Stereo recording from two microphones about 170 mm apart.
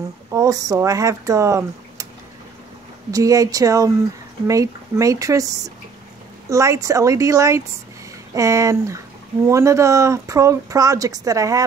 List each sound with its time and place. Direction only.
0.3 s speech: 20° right (ahead or behind)
3.1 s speech: 20° right (ahead or behind)
6.5 s speech: 20° right (ahead or behind)